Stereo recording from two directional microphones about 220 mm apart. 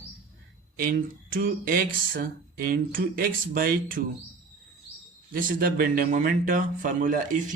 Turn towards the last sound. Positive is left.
turn(degrees=-35)  # may be behind; listen again after turning